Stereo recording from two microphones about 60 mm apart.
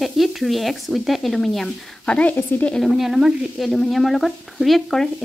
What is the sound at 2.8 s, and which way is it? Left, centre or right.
Speech, centre.